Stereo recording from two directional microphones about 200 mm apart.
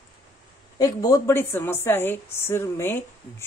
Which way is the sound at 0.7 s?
15° left (ahead or behind).